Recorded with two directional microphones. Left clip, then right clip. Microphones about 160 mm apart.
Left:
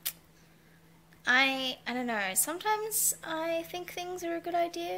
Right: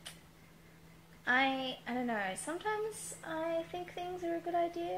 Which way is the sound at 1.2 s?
15° left (ahead or behind).